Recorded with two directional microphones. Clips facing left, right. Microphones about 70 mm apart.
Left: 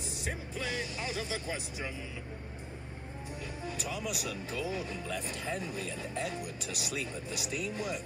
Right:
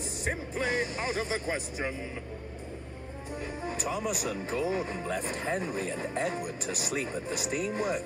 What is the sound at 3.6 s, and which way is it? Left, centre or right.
Speech, right.